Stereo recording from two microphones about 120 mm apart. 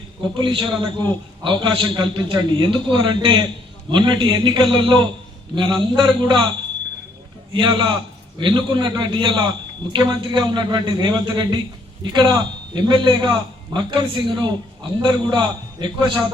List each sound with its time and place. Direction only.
0.2 s a man's voice: 40° right (ahead or behind)
7.5 s a man's voice: 40° right (ahead or behind)